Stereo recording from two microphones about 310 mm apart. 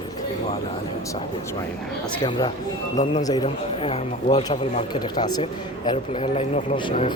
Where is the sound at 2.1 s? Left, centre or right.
Centre.